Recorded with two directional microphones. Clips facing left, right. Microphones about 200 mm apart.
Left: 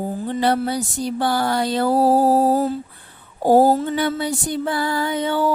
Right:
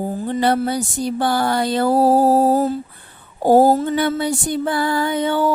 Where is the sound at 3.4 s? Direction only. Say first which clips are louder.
Right 2 dB; 55° right (ahead or behind).